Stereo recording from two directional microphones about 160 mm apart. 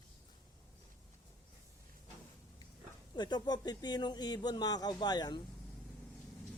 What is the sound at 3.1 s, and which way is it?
Speech, 25° left (ahead or behind).